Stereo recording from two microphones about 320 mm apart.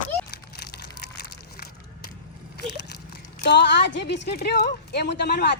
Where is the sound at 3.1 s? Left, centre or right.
Left.